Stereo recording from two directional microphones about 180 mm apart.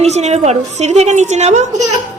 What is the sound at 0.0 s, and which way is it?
A woman's voice, 35° right (ahead or behind).